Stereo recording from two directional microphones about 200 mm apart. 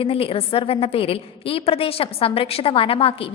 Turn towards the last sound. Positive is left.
turn(degrees=30)  # may be behind; listen again after turning